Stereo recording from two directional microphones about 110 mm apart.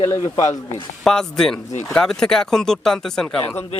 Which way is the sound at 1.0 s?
5° left (ahead or behind).